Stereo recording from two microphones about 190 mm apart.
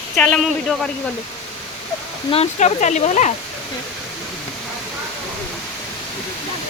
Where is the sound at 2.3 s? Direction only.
35° left (ahead or behind).